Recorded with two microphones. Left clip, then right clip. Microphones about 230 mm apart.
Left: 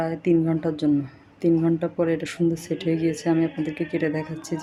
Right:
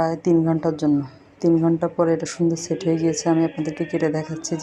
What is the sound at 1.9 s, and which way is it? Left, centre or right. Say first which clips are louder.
Speech: right 4 dB; centre.